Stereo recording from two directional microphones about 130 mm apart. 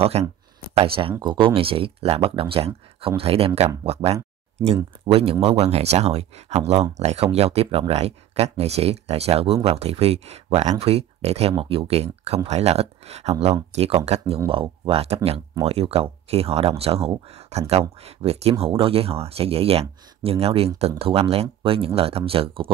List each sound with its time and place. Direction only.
0.2 s speech: 55° right (ahead or behind)